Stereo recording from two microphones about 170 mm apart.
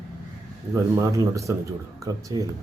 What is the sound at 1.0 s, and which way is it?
A man's voice, 20° right (ahead or behind).